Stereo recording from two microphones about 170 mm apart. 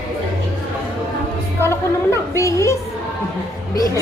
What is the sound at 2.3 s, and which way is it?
Speech, 15° left (ahead or behind).